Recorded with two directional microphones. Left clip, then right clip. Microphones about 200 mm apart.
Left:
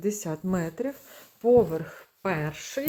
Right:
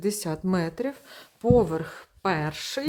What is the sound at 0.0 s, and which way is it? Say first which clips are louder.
Speech: right 2 dB; 10° right (ahead or behind).